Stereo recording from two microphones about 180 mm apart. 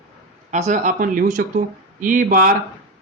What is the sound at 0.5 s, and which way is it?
Speech, 45° right (ahead or behind).